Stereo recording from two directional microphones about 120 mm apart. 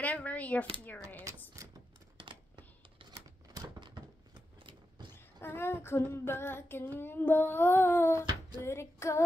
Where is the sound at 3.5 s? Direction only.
40° right (ahead or behind).